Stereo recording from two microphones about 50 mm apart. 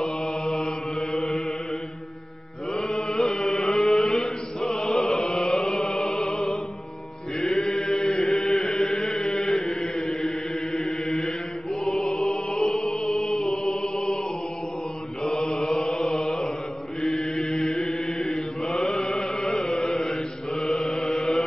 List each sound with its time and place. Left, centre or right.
0.0 s mantra: centre
2.7 s mantra: centre
3.3 s music: centre
7.3 s chant: centre
11.8 s music: centre
15.2 s mantra: centre
15.5 s chant: centre
17.0 s mantra: centre
17.4 s chant: centre